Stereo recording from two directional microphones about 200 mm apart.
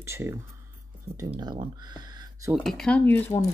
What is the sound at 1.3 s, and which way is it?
Speech, 25° right (ahead or behind).